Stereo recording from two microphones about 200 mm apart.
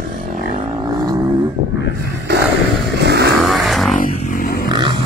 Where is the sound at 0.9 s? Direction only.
20° right (ahead or behind).